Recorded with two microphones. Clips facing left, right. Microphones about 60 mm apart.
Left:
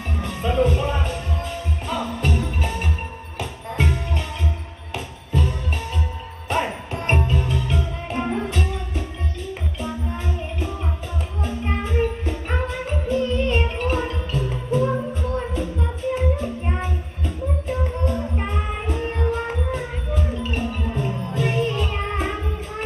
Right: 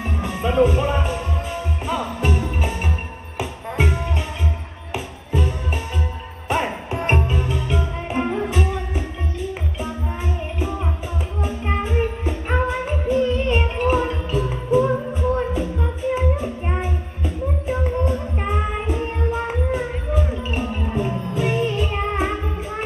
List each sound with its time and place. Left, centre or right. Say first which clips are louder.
0.2 s music: right 3 dB; centre
11.4 s music: right 2 dB; centre